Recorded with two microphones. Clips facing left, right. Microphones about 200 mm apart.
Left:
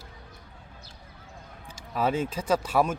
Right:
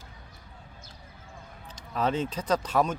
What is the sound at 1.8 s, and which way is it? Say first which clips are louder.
Speech: left 1 dB; 10° left (ahead or behind).